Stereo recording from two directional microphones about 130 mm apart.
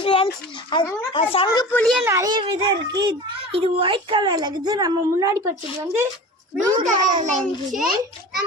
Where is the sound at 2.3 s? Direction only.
40° right (ahead or behind).